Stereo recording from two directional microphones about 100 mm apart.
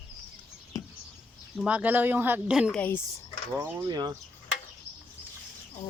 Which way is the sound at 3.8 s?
40° right (ahead or behind).